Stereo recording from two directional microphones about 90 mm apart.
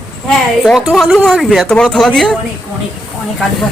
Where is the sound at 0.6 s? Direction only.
Centre (ahead or behind).